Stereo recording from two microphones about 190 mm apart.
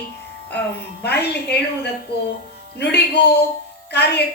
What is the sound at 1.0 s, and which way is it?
A woman's voice, 60° left (ahead or behind).